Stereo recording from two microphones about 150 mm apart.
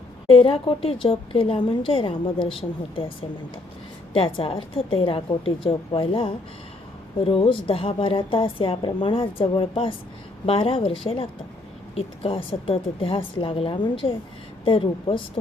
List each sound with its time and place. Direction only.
0.3 s speech: 40° left (ahead or behind)